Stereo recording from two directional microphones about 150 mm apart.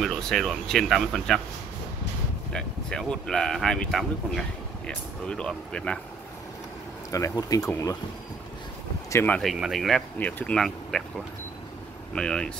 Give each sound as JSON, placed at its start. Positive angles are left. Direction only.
{"t": 0.0, "sound": "speech", "side_deg": 0}
{"t": 2.5, "sound": "speech", "side_deg": 5}
{"t": 7.1, "sound": "speech", "side_deg": 20}
{"t": 9.1, "sound": "speech", "side_deg": 10}
{"t": 9.4, "sound": "speech", "side_deg": 0}
{"t": 12.1, "sound": "speech", "side_deg": 5}